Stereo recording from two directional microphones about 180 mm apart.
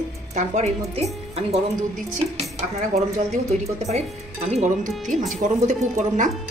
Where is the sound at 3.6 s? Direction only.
35° right (ahead or behind).